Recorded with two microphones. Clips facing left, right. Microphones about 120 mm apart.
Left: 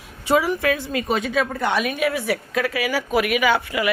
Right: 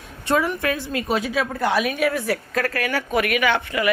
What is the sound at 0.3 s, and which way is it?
A woman's voice, 5° left (ahead or behind).